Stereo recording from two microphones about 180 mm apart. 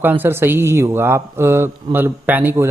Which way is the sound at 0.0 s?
10° right (ahead or behind).